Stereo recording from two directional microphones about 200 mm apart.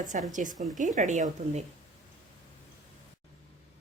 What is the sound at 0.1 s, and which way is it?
Speech, 40° right (ahead or behind).